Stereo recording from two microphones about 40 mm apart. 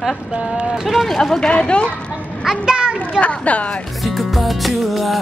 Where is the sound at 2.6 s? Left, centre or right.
Right.